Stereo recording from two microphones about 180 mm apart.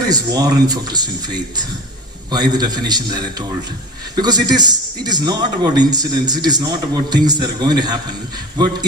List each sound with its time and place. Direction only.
0.1 s a man's voice: 20° right (ahead or behind)